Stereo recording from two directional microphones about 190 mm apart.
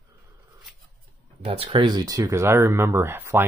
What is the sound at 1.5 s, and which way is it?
Speech, 30° right (ahead or behind).